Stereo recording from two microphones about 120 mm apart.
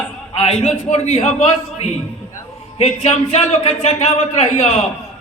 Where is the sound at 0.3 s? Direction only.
65° left (ahead or behind).